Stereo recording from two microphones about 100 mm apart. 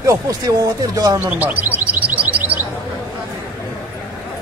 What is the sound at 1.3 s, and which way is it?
Bird, 15° right (ahead or behind).